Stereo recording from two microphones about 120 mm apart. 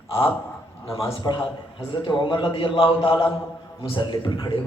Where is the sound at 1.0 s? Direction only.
35° left (ahead or behind).